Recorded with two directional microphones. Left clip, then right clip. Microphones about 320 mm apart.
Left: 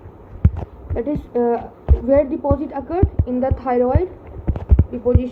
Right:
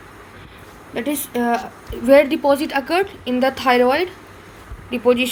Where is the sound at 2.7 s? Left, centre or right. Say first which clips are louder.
Right 4 dB; right.